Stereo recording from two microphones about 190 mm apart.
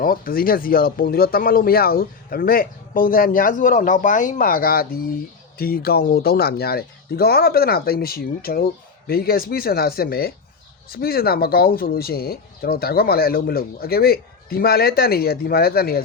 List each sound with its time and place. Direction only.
0.0 s speech: 50° left (ahead or behind)